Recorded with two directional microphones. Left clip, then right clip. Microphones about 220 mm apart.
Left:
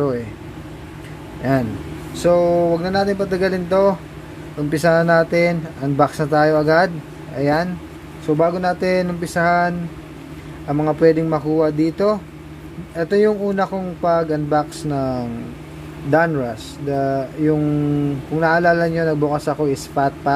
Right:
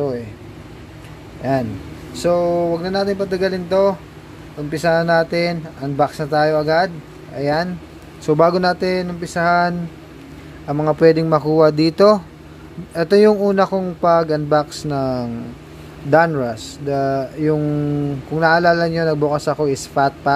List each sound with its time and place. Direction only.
1.4 s a man's voice: centre (ahead or behind)
8.3 s a man's voice: 25° right (ahead or behind)
8.7 s a man's voice: 5° right (ahead or behind)